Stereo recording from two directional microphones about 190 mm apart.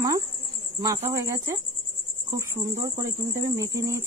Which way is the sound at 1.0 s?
15° right (ahead or behind).